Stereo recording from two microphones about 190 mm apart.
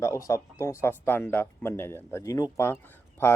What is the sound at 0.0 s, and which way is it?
Speech, 15° left (ahead or behind).